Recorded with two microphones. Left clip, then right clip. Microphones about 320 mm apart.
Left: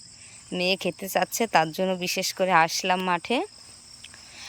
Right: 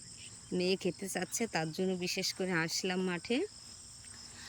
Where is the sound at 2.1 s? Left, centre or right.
Centre.